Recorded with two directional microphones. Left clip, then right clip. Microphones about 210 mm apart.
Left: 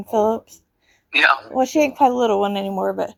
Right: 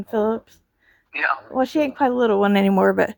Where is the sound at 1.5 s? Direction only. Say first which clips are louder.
Left 3 dB; 20° right (ahead or behind).